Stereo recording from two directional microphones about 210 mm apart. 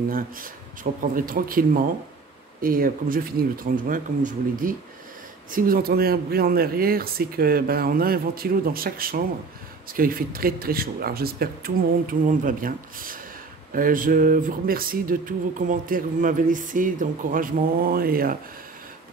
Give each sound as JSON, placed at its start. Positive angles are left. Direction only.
{"t": 1.1, "sound": "speech", "side_deg": -40}